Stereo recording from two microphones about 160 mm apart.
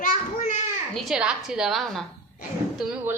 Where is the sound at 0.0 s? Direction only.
55° left (ahead or behind).